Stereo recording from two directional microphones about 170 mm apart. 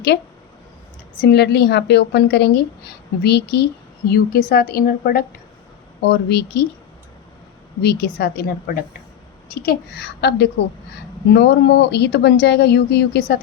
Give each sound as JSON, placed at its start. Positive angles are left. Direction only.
{"t": 1.2, "sound": "a woman's voice", "side_deg": 75}
{"t": 4.1, "sound": "a woman's voice", "side_deg": 60}
{"t": 6.0, "sound": "a woman's voice", "side_deg": 80}
{"t": 7.8, "sound": "a woman's voice", "side_deg": 75}